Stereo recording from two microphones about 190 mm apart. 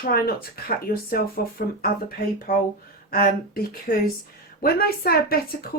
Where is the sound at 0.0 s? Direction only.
55° left (ahead or behind).